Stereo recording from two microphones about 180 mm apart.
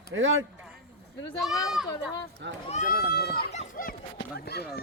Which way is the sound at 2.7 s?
55° left (ahead or behind).